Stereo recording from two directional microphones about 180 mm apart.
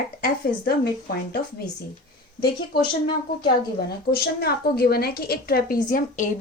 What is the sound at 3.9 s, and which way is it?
Speech, 60° left (ahead or behind).